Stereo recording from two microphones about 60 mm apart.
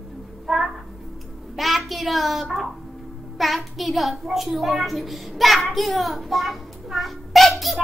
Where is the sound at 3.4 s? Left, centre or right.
Centre.